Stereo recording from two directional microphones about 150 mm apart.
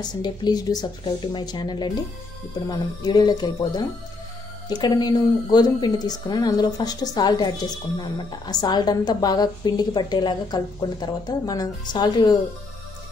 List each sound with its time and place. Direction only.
0.0 s a woman's voice: 30° left (ahead or behind)
3.0 s a woman's voice: 25° left (ahead or behind)